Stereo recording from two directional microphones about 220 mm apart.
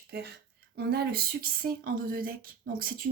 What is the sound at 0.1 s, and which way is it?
Speech, 50° right (ahead or behind).